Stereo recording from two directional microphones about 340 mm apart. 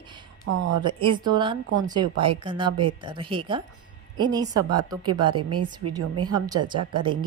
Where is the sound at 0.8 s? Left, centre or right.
Centre.